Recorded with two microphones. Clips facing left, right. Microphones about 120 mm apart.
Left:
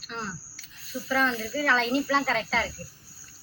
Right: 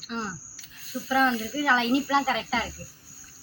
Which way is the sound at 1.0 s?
10° right (ahead or behind).